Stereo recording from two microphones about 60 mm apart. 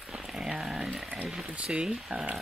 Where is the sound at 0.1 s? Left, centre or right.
Centre.